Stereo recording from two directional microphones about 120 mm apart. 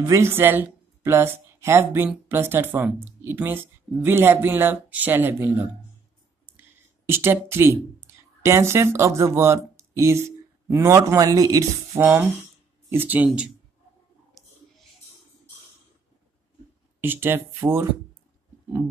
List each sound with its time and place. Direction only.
0.0 s a woman's voice: 20° right (ahead or behind)
7.1 s speech: 20° right (ahead or behind)
12.0 s speech: 15° right (ahead or behind)
17.0 s speech: 15° right (ahead or behind)